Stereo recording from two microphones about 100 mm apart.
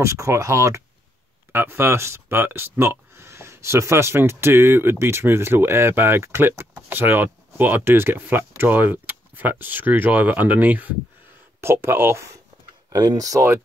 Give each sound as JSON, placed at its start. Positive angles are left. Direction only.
{"t": 0.0, "sound": "speech", "side_deg": -30}
{"t": 12.9, "sound": "speech", "side_deg": -40}